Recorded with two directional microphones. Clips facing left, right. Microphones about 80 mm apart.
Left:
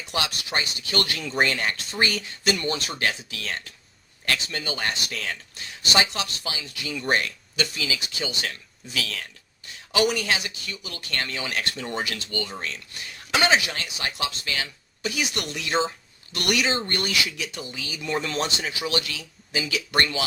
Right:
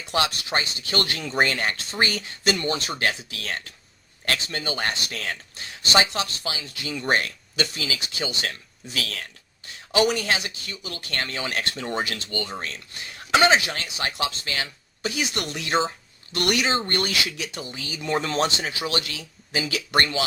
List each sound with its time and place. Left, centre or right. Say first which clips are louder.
0.1 s speech: right 4 dB; right
2.6 s speech: right 1 dB; right
9.9 s speech: right 1 dB; right